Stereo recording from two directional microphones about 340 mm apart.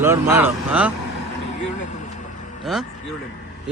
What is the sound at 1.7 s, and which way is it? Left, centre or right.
Vehicle, left.